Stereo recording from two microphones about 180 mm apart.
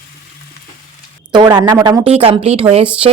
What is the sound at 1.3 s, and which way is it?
Speech, 25° right (ahead or behind).